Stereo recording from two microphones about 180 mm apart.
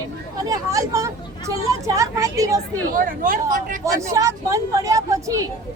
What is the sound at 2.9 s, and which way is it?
Speech, 50° right (ahead or behind).